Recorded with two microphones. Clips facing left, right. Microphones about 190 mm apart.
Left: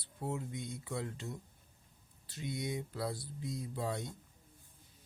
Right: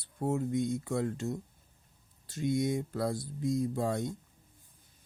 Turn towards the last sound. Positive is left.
turn(degrees=-45)  # may be behind; listen again after turning